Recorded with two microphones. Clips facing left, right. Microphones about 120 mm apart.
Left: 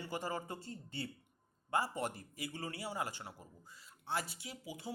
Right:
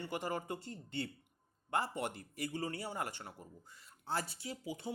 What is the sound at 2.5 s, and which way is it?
Speech, 30° right (ahead or behind).